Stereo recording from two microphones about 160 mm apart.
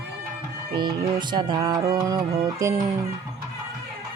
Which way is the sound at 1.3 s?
30° right (ahead or behind).